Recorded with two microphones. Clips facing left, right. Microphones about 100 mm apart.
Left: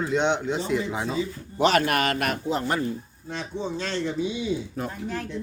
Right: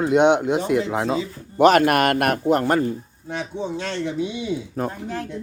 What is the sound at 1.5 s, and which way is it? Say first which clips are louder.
Speech: right 7 dB; 50° right (ahead or behind).